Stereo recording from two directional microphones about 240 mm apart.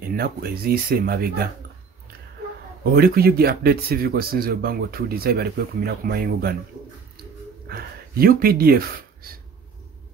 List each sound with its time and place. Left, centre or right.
0.1 s speech: right
2.8 s speech: right
7.6 s speech: right